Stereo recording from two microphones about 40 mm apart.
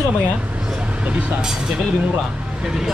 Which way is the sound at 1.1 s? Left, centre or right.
Right.